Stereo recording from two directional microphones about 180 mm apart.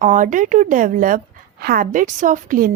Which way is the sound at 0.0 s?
45° right (ahead or behind).